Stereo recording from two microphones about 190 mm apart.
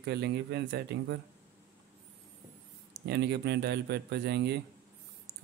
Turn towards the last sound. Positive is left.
turn(degrees=-60)  # may be behind; listen again after turning